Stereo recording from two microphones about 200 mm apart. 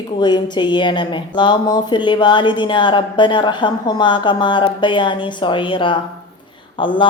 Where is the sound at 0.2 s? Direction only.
20° left (ahead or behind).